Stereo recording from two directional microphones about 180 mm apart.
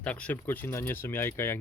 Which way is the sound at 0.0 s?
5° left (ahead or behind).